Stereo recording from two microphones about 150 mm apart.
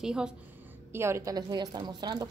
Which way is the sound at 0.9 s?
15° right (ahead or behind).